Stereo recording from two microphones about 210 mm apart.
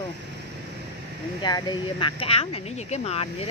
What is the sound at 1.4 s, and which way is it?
Speech, 20° left (ahead or behind).